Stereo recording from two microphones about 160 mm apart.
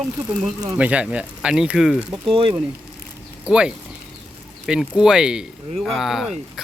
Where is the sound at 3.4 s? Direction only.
5° right (ahead or behind).